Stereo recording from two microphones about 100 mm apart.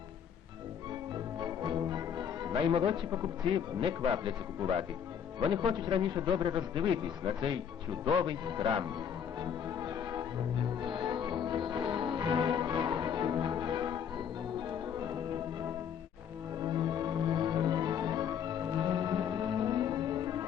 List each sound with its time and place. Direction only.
1.4 s music: 50° right (ahead or behind)
3.8 s a man's voice: 60° right (ahead or behind)
5.4 s a man's voice: 50° right (ahead or behind)
9.4 s music: 45° right (ahead or behind)
16.6 s music: 45° right (ahead or behind)